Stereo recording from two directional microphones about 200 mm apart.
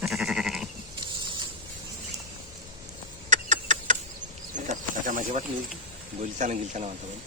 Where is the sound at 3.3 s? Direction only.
40° right (ahead or behind).